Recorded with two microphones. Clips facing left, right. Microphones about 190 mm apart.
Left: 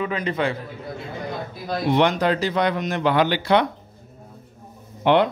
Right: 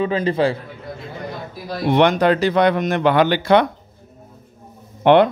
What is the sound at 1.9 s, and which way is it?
Speech, 60° right (ahead or behind).